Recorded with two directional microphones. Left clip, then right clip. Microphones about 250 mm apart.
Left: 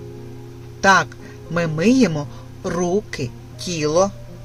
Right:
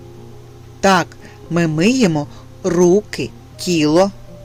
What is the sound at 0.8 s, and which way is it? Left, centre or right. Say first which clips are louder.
Speech: even; right.